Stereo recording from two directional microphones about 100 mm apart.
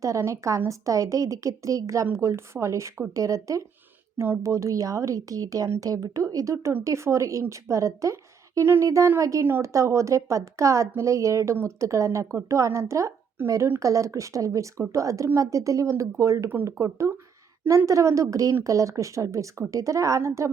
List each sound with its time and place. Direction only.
0.0 s speech: 30° right (ahead or behind)